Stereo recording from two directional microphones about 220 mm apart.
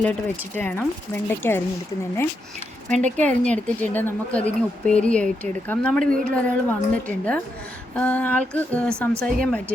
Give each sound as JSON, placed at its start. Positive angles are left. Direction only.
{"t": 0.0, "sound": "speech", "side_deg": 10}
{"t": 3.2, "sound": "a woman's voice", "side_deg": 5}